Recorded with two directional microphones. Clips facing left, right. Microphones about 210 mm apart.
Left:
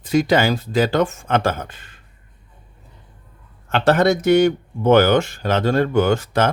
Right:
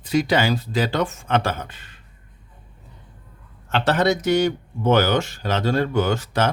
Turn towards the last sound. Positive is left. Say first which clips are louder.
# left 4 dB
turn(degrees=50)  # may be behind; listen again after turning